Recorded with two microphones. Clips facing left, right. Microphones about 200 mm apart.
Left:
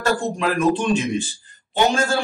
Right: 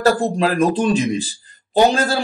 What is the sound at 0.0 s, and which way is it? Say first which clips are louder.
Speech: right 5 dB; 35° right (ahead or behind).